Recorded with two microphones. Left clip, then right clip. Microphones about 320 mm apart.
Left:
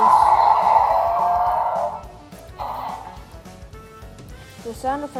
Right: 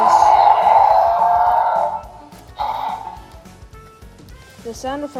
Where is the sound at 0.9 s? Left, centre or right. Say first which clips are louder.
Right 5 dB; right.